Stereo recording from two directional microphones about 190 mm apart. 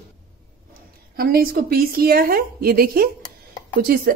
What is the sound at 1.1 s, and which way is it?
A woman's voice, 50° right (ahead or behind).